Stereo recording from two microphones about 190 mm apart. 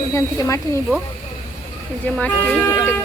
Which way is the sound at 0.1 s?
15° left (ahead or behind).